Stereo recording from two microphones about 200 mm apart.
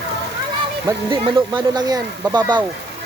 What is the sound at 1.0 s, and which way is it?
Speech, 25° right (ahead or behind).